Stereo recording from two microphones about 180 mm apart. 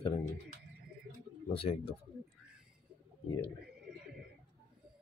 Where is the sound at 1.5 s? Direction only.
30° left (ahead or behind).